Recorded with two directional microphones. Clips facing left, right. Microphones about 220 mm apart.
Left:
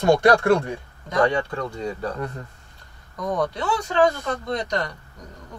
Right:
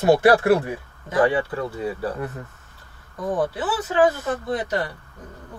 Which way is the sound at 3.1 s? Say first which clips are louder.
Right 1 dB; 30° right (ahead or behind).